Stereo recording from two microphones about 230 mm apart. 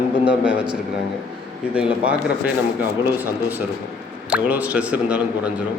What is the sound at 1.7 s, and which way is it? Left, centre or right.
Speech, centre.